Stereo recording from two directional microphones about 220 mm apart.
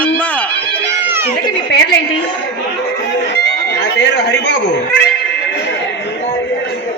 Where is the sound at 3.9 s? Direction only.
50° left (ahead or behind).